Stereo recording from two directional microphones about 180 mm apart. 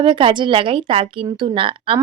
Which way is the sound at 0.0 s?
30° right (ahead or behind).